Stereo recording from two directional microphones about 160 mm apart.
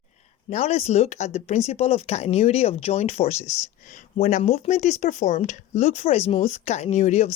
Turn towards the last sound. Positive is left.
turn(degrees=45)  # may be behind; listen again after turning